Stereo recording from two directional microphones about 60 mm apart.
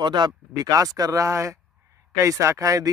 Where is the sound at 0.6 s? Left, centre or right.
Right.